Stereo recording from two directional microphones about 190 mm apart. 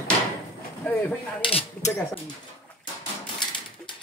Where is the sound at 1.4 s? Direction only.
30° left (ahead or behind).